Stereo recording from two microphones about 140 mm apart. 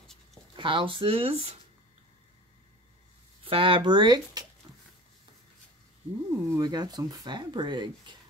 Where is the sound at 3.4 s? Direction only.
40° right (ahead or behind).